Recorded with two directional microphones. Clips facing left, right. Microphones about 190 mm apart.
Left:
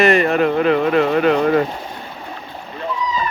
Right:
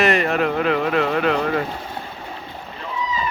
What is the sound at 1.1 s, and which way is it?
Speech, 40° left (ahead or behind).